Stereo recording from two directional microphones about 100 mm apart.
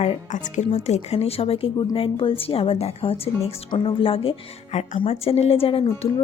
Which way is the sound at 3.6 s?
60° left (ahead or behind).